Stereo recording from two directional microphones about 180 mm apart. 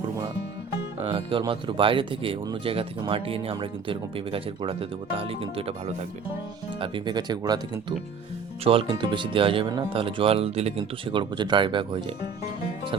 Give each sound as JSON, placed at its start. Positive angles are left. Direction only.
{"t": 1.1, "sound": "speech", "side_deg": -25}
{"t": 6.7, "sound": "speech", "side_deg": -30}